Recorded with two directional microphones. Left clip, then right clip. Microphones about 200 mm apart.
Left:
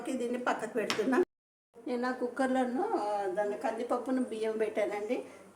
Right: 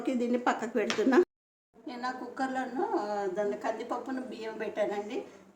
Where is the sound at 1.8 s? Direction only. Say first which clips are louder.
Left 3 dB; 40° left (ahead or behind).